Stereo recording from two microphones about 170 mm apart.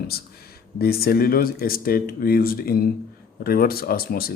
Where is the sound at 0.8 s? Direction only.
65° left (ahead or behind).